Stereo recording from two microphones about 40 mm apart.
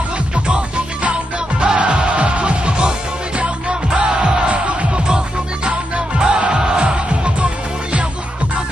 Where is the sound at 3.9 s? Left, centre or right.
Centre.